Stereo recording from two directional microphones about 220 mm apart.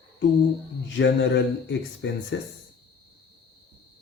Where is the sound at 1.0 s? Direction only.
55° left (ahead or behind).